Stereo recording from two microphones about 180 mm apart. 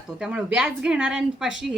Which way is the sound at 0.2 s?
5° right (ahead or behind).